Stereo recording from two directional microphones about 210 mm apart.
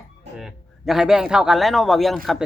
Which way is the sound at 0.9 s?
Centre (ahead or behind).